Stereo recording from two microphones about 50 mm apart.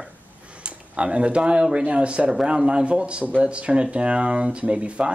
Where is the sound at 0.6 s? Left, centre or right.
Right.